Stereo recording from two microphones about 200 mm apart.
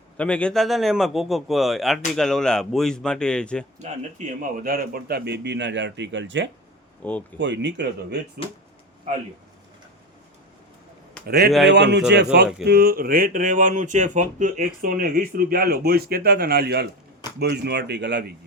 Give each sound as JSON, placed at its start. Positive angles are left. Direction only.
{"t": 0.2, "sound": "a man's voice", "side_deg": 5}
{"t": 4.4, "sound": "a man's voice", "side_deg": -45}
{"t": 11.3, "sound": "a man's voice", "side_deg": -55}